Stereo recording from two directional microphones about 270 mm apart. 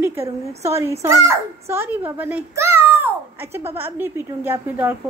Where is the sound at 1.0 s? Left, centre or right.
Centre.